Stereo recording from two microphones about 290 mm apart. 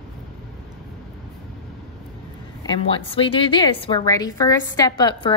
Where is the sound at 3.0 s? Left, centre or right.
Centre.